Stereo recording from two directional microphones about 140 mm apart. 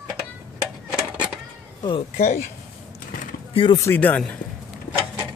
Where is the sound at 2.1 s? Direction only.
55° left (ahead or behind).